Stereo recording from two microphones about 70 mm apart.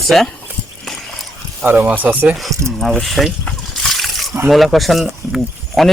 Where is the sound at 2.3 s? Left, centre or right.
Centre.